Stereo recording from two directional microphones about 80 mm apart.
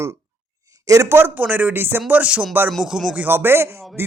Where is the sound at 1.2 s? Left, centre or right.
Right.